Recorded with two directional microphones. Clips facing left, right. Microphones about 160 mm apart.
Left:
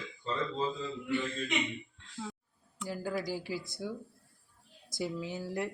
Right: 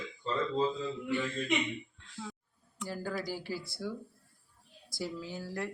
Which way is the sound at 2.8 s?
15° left (ahead or behind).